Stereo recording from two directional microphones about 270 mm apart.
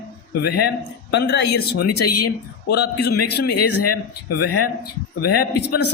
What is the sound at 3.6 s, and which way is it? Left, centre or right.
Speech, left.